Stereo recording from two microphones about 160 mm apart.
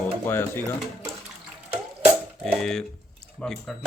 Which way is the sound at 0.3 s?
15° left (ahead or behind).